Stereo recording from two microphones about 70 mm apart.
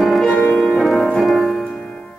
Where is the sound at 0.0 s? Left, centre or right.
Centre.